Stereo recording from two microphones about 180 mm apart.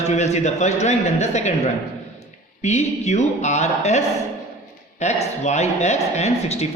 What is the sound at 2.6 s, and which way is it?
A man's voice, 40° left (ahead or behind).